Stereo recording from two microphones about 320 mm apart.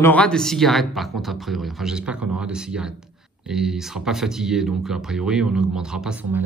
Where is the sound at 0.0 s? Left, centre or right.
Centre.